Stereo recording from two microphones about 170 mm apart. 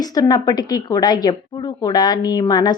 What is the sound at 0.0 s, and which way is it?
A woman's voice, 20° left (ahead or behind).